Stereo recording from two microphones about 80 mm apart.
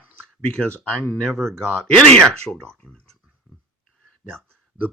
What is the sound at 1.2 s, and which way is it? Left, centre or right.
Speech, centre.